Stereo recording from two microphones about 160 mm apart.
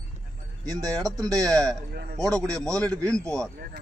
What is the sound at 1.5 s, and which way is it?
Speech, 5° left (ahead or behind).